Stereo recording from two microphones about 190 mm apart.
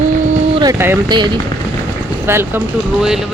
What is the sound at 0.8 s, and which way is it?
Speech, 10° right (ahead or behind).